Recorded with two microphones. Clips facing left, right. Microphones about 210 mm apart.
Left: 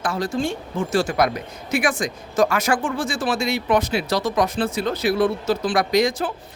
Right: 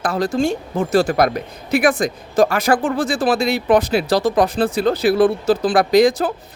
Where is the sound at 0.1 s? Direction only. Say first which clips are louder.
Right 4 dB; 40° right (ahead or behind).